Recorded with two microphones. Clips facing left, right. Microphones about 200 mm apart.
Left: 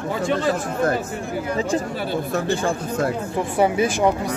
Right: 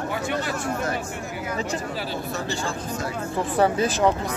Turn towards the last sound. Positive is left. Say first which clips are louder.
# left 2 dB
turn(degrees=10)  # may be behind; listen again after turning